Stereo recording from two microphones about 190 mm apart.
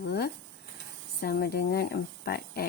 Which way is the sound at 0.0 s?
55° left (ahead or behind).